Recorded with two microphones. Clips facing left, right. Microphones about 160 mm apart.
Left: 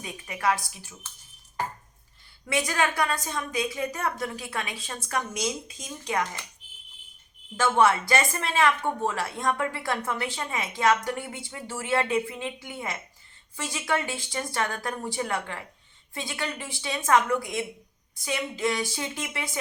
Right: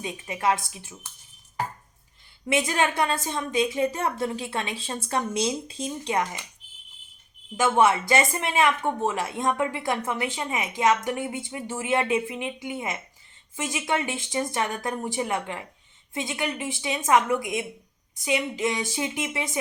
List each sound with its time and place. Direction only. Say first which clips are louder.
0.0 s speech: right 2 dB; 25° right (ahead or behind)
2.5 s speech: right 2 dB; 25° right (ahead or behind)
7.5 s speech: right 1 dB; 15° right (ahead or behind)